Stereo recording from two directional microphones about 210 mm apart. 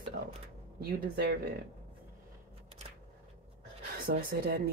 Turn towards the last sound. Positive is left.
turn(degrees=-45)  # may be behind; listen again after turning